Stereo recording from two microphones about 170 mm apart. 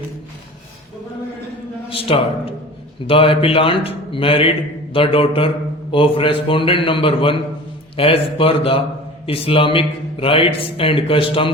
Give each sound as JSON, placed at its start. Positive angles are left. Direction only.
{"t": 2.0, "sound": "speech", "side_deg": 30}